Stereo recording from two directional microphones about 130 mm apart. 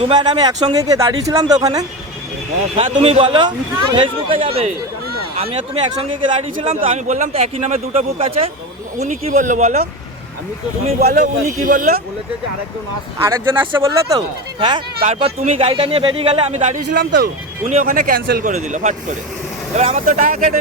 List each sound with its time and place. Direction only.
0.0 s speech: 35° right (ahead or behind)
2.7 s speech: 50° right (ahead or behind)
11.1 s a man's voice: 90° right
13.1 s speech: 20° right (ahead or behind); by 15.1 s 35° right (ahead or behind)
15.1 s speech: 50° right (ahead or behind); by 17.1 s 90° right
17.7 s speech: 75° right (ahead or behind)
19.7 s speech: 55° right (ahead or behind)